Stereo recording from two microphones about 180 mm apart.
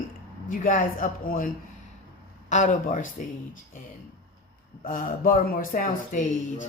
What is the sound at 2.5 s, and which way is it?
Speech, 45° left (ahead or behind).